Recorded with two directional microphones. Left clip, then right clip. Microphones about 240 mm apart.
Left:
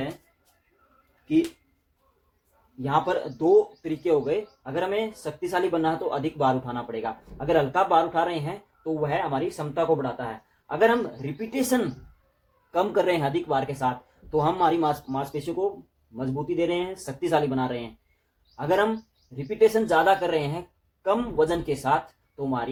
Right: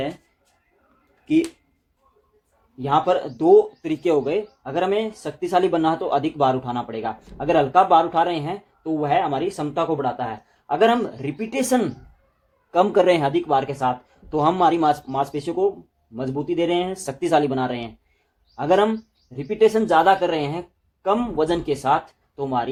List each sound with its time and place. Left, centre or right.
2.8 s speech: right